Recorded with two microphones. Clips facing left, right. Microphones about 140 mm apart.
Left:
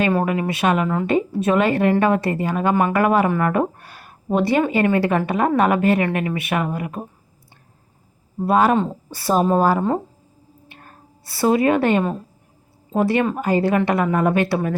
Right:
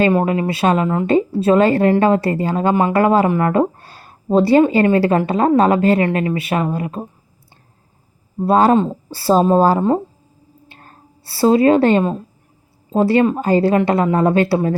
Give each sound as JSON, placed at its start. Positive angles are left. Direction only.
{"t": 0.0, "sound": "a woman's voice", "side_deg": -25}
{"t": 8.4, "sound": "a woman's voice", "side_deg": -30}
{"t": 11.3, "sound": "a woman's voice", "side_deg": -30}
{"t": 13.1, "sound": "a woman's voice", "side_deg": -25}